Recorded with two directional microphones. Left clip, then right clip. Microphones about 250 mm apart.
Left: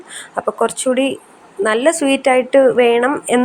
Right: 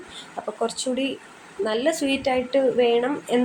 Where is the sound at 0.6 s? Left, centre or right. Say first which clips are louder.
Left 9 dB; left.